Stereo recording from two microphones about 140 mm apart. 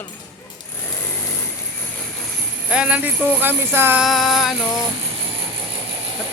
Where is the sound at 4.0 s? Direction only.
Centre (ahead or behind).